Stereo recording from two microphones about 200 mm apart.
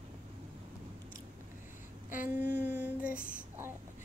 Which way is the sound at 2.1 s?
10° right (ahead or behind).